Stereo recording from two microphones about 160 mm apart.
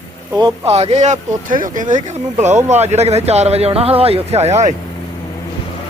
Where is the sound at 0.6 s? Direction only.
40° right (ahead or behind).